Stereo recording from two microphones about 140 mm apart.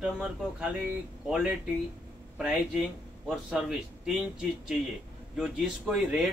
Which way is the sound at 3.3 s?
5° right (ahead or behind).